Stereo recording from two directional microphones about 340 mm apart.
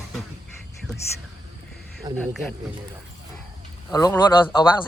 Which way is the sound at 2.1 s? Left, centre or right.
Centre.